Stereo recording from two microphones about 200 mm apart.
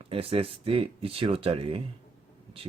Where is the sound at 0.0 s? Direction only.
25° right (ahead or behind).